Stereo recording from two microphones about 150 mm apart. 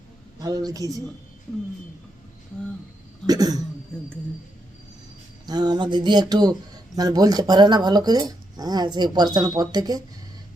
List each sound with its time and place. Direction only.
0.3 s a woman's voice: 25° right (ahead or behind)
3.2 s speech: 25° right (ahead or behind)
5.5 s speech: 30° right (ahead or behind)